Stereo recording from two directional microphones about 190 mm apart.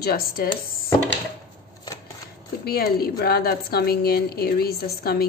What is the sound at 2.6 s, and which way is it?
A woman's voice, 55° left (ahead or behind).